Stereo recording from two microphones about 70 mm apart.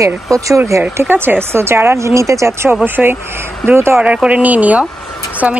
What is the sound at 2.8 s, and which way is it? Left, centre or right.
Speech, right.